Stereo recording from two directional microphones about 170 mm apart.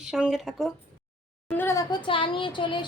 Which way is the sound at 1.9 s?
30° left (ahead or behind).